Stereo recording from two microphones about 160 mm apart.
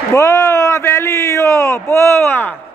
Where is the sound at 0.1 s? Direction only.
20° left (ahead or behind).